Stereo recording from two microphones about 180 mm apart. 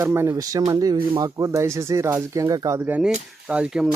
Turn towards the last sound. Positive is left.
turn(degrees=-5)  # may be behind; listen again after turning